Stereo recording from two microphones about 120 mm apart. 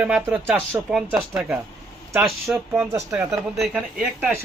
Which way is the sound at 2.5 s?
5° right (ahead or behind).